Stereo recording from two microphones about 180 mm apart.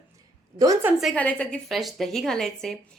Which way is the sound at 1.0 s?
5° left (ahead or behind).